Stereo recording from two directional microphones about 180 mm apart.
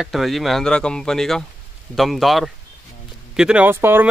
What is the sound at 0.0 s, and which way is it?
Speech, centre (ahead or behind).